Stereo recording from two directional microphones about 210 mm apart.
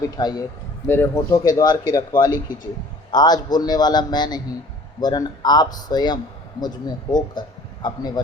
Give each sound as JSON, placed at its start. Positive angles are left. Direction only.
{"t": 0.0, "sound": "a man's voice", "side_deg": 20}